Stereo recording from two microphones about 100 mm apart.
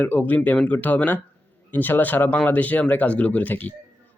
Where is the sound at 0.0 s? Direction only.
15° left (ahead or behind).